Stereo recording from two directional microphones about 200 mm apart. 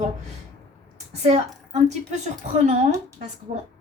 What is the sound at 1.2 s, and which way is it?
Speech, 35° right (ahead or behind).